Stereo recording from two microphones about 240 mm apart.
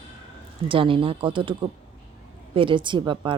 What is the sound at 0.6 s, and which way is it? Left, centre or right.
Speech, right.